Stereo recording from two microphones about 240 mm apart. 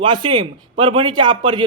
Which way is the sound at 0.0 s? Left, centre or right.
Centre.